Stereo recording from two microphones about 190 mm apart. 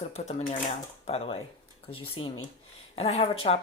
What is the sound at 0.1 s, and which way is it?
Speech, 35° left (ahead or behind).